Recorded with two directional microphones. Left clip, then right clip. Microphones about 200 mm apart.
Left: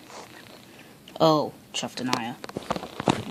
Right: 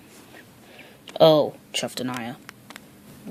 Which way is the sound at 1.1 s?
25° right (ahead or behind).